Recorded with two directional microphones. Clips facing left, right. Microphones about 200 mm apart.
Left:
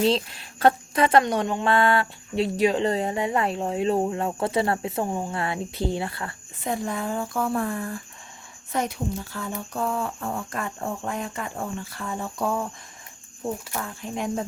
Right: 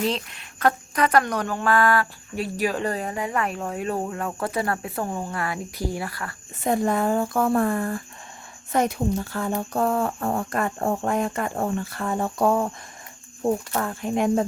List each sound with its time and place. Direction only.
0.0 s speech: 30° left (ahead or behind)
6.7 s speech: 55° right (ahead or behind)